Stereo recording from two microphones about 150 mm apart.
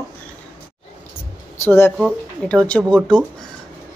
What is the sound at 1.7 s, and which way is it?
A woman's voice, 15° left (ahead or behind).